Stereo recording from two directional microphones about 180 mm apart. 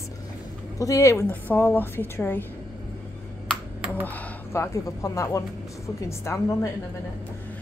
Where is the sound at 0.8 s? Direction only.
15° left (ahead or behind).